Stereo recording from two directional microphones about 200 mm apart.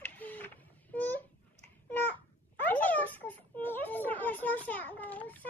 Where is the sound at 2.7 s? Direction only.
10° left (ahead or behind).